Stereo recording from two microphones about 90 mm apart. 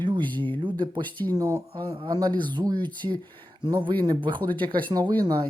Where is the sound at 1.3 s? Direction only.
40° right (ahead or behind); by 5.1 s 55° right (ahead or behind).